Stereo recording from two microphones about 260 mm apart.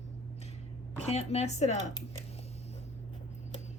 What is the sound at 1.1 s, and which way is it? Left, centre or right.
Speech, left.